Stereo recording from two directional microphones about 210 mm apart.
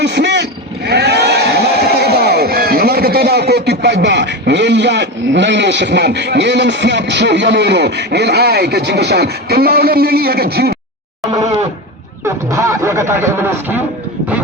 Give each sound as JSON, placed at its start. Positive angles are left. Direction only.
{"t": 0.0, "sound": "vehicle", "side_deg": -55}
{"t": 0.9, "sound": "speech", "side_deg": -50}
{"t": 11.2, "sound": "a sound", "side_deg": -15}
{"t": 12.2, "sound": "speech", "side_deg": -15}